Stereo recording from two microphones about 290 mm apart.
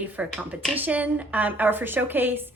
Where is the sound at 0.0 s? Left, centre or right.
Centre.